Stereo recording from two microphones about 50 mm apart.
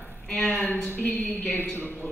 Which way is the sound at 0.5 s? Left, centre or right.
Left.